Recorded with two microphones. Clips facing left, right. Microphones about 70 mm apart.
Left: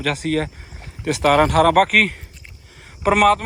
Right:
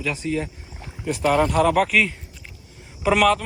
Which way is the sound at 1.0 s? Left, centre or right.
Left.